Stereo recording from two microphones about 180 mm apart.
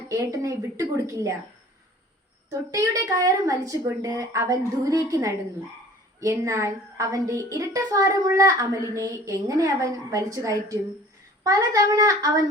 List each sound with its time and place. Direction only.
0.1 s a woman's voice: 15° right (ahead or behind)
2.5 s a woman's voice: 20° right (ahead or behind)